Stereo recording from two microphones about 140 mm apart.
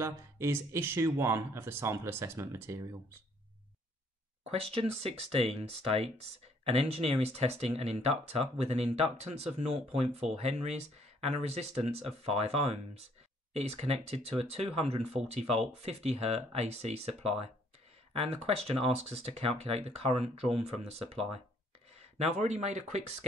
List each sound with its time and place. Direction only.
0.0 s speech: 20° right (ahead or behind)
4.5 s speech: 45° right (ahead or behind)
18.1 s speech: 45° right (ahead or behind)